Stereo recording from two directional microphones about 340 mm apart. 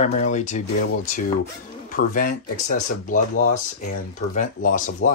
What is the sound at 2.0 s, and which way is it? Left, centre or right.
Speech, left.